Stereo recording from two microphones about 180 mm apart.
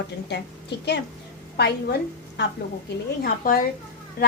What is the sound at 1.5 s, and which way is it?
Speech, 65° left (ahead or behind).